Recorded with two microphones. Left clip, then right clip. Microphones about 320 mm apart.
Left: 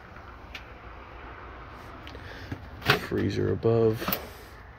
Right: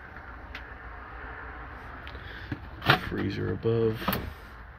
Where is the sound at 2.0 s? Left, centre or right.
Centre.